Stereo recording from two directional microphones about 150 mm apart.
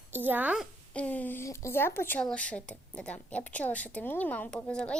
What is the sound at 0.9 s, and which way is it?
Speech, 10° left (ahead or behind).